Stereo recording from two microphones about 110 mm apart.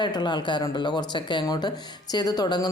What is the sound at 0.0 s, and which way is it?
Speech, 40° left (ahead or behind).